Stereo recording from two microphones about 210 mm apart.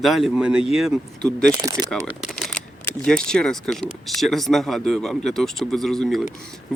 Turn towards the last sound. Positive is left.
turn(degrees=0)  # may be behind; listen again after turning